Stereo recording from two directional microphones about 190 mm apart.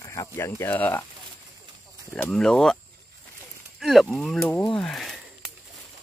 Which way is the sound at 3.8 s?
Centre (ahead or behind).